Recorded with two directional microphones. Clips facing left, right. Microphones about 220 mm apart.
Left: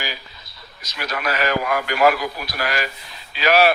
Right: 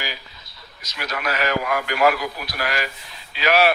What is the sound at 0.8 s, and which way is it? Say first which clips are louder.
Speech: left 2 dB; 35° left (ahead or behind).